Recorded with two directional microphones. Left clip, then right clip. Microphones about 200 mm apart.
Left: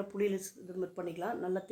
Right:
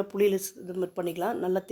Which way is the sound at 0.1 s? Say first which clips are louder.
Right 9 dB; 40° right (ahead or behind).